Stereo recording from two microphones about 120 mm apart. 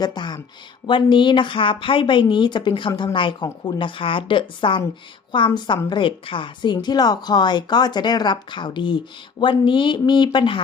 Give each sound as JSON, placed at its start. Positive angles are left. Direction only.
{"t": 0.0, "sound": "a woman's voice", "side_deg": 35}